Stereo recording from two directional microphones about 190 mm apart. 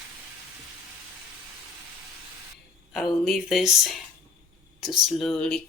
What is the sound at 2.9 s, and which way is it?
Speech, centre (ahead or behind).